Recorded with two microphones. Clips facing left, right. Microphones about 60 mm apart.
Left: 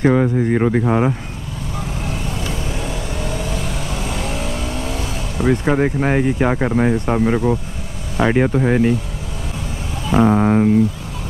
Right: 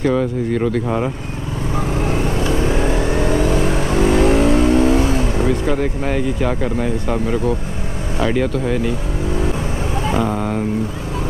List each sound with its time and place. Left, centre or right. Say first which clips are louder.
0.0 s speech: left 2 dB; left
1.8 s vehicle: right 7 dB; right
5.5 s speech: left 2 dB; left
10.1 s speech: left 9 dB; left